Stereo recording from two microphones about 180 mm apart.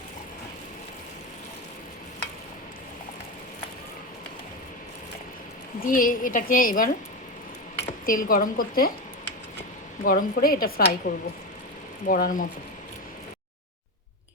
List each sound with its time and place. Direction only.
5.8 s a woman's voice: 50° left (ahead or behind)
8.0 s a woman's voice: 50° left (ahead or behind)
10.0 s a woman's voice: 55° left (ahead or behind)